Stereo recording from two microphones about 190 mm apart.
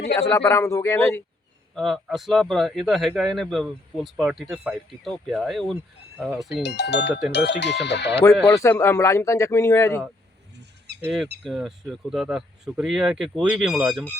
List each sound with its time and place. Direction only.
0.2 s a man's voice: 15° left (ahead or behind)
1.7 s speech: centre (ahead or behind)
6.5 s speech: 60° left (ahead or behind)
8.4 s a man's voice: 15° left (ahead or behind)
11.4 s speech: centre (ahead or behind)